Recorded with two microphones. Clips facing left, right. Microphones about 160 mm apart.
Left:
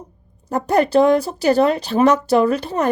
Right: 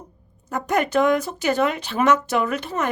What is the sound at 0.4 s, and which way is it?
Speech, 35° left (ahead or behind).